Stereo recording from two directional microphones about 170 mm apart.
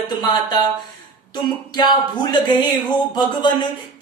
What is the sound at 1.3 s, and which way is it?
Speech, 25° left (ahead or behind).